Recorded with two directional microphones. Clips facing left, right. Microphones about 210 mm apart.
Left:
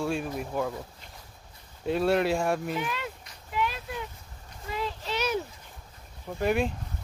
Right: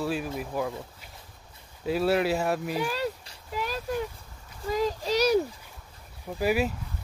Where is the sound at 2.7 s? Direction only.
35° right (ahead or behind).